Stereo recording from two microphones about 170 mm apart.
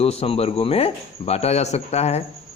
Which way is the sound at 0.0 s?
35° left (ahead or behind).